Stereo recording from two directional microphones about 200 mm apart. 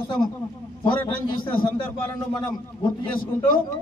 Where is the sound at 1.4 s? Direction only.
25° left (ahead or behind).